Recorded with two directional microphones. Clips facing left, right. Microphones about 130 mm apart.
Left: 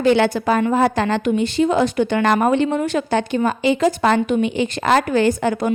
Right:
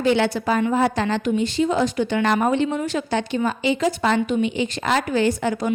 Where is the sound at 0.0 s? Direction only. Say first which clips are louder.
Left 4 dB; 55° left (ahead or behind).